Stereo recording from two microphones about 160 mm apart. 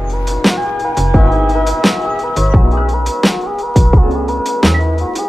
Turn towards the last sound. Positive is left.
turn(degrees=0)  # may be behind; listen again after turning